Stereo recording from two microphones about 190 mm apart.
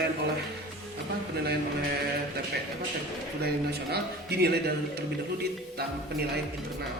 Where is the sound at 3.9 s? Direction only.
60° right (ahead or behind).